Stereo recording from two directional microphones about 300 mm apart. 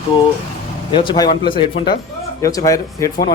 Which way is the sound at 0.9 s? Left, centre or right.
Centre.